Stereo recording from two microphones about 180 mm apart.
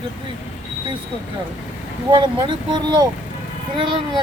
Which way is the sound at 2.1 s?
25° right (ahead or behind).